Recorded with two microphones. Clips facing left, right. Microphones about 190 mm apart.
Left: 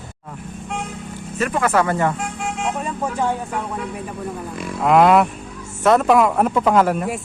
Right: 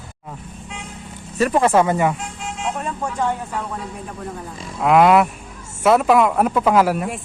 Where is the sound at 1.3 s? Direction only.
35° right (ahead or behind); by 2.1 s 15° right (ahead or behind).